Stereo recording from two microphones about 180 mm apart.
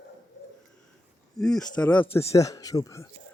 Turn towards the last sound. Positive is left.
turn(degrees=15)  # may be behind; listen again after turning